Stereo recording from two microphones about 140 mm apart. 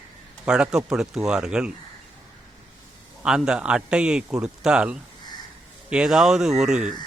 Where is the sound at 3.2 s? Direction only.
5° right (ahead or behind).